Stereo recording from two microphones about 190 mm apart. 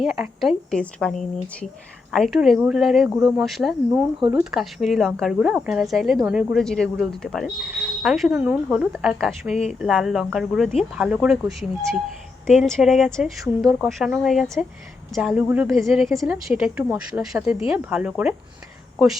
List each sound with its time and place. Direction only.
0.0 s speech: centre (ahead or behind)